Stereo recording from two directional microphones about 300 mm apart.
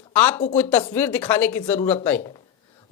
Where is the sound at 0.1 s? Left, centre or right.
Centre.